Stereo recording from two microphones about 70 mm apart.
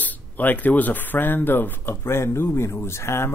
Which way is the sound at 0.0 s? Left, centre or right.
Left.